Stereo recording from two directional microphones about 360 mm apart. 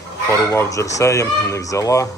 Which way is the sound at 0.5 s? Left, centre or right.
Centre.